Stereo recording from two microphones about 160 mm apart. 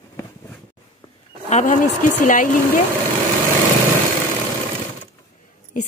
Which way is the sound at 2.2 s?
55° left (ahead or behind).